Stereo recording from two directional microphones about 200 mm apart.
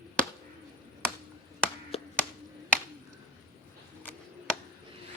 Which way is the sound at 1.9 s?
30° left (ahead or behind).